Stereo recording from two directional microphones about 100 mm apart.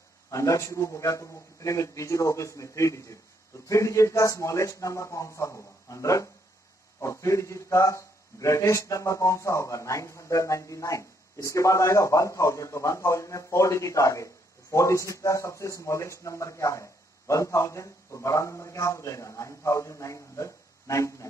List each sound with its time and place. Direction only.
0.3 s a man's voice: 30° left (ahead or behind)